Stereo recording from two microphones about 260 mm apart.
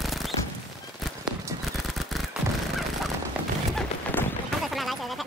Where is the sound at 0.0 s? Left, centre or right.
Centre.